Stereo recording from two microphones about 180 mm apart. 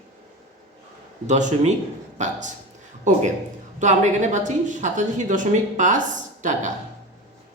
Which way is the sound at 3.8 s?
40° right (ahead or behind).